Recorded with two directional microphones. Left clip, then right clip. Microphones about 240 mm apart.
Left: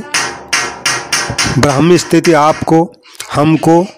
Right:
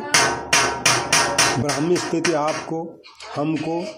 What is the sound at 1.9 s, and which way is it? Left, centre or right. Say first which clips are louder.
Speech: left 11 dB; left.